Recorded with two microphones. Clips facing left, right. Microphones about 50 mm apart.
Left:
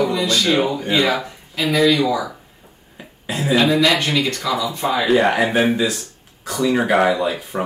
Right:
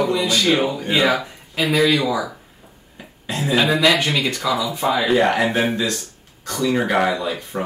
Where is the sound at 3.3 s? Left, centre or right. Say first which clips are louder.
Left 2 dB; centre.